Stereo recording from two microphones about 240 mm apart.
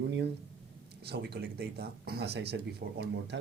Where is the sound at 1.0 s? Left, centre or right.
Right.